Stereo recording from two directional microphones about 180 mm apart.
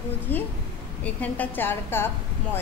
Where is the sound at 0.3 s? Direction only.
10° left (ahead or behind).